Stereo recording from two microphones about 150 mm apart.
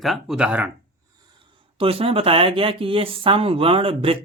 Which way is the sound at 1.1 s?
35° right (ahead or behind).